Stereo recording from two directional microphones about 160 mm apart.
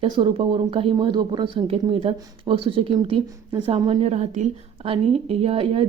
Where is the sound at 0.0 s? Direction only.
35° right (ahead or behind).